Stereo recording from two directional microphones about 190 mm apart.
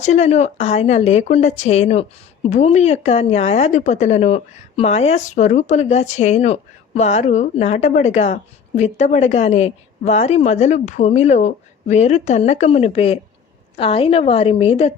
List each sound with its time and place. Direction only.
0.0 s speech: 35° left (ahead or behind)